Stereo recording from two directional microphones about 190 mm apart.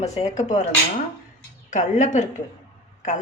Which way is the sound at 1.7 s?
40° left (ahead or behind).